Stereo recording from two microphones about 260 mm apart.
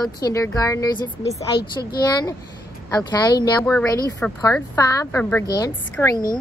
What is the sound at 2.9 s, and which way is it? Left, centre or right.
A woman's voice, centre.